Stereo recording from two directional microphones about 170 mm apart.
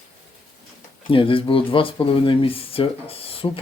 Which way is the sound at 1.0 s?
30° left (ahead or behind).